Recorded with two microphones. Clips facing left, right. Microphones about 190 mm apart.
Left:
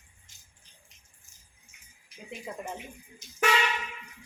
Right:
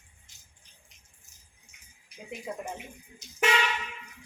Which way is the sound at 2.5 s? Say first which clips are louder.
Right 2 dB; 5° right (ahead or behind).